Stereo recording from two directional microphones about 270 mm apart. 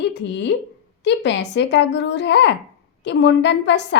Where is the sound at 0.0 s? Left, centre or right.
Left.